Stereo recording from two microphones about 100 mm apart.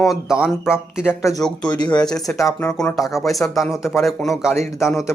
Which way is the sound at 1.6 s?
45° left (ahead or behind).